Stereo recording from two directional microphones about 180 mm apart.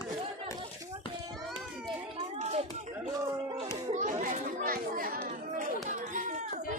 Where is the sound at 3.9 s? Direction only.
45° right (ahead or behind).